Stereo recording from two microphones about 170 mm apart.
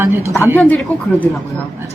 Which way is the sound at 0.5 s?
10° left (ahead or behind).